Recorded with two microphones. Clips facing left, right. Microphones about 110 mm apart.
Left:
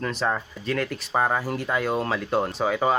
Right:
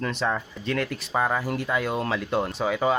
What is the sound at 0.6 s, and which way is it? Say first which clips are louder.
Speech: left 1 dB; 20° right (ahead or behind).